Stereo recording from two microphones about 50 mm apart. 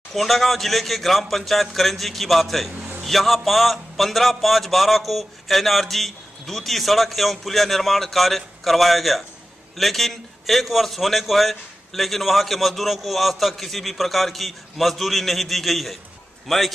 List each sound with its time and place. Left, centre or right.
0.1 s a man's voice: centre
2.7 s a sound: right
3.0 s a man's voice: centre